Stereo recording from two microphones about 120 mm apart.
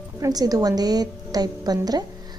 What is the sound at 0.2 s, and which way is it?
Speech, 30° right (ahead or behind).